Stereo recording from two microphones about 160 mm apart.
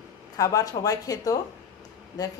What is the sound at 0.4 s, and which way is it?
A woman's voice, 20° left (ahead or behind).